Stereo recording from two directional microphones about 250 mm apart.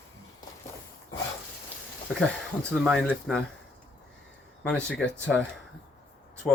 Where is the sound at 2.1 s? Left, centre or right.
Centre.